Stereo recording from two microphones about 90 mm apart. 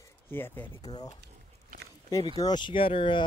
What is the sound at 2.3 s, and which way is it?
Speech, 55° left (ahead or behind).